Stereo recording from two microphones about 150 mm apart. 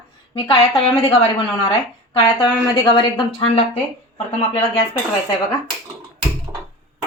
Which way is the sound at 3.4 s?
45° left (ahead or behind).